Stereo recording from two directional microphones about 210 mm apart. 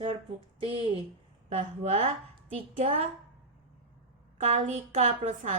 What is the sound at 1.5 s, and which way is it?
A woman's voice, 35° right (ahead or behind).